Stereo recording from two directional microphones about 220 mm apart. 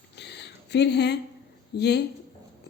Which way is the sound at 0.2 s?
50° left (ahead or behind).